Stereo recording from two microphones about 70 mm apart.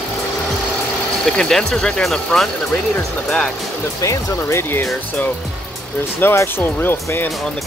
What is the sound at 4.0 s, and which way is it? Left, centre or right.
Speech, left.